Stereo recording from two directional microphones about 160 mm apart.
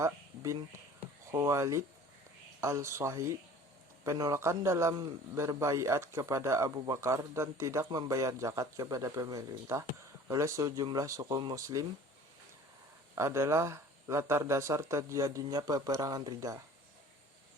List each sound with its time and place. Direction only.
0.0 s a man's voice: 20° right (ahead or behind)
13.1 s a man's voice: 20° right (ahead or behind)